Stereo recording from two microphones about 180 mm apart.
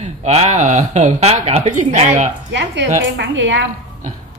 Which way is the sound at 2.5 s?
75° right (ahead or behind).